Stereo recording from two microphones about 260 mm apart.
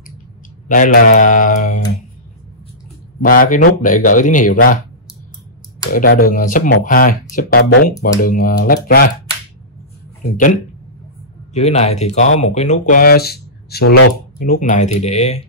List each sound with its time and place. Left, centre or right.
0.7 s speech: left
3.2 s speech: left
5.9 s speech: left
10.3 s speech: left